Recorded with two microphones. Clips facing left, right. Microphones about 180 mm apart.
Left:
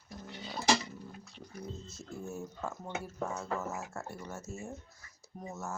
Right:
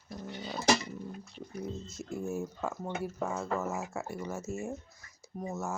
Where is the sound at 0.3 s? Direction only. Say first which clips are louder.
Right 3 dB; 45° right (ahead or behind).